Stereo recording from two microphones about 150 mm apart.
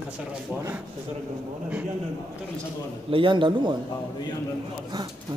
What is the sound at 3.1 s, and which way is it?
Speech, 35° right (ahead or behind).